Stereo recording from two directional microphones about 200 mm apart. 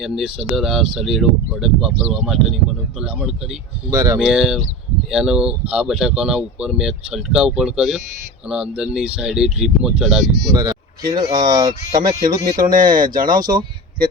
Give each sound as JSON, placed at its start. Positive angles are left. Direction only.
{"t": 0.0, "sound": "speech", "side_deg": -5}
{"t": 3.9, "sound": "speech", "side_deg": -20}
{"t": 4.2, "sound": "speech", "side_deg": 0}
{"t": 10.5, "sound": "speech", "side_deg": -20}
{"t": 12.5, "sound": "speech", "side_deg": -45}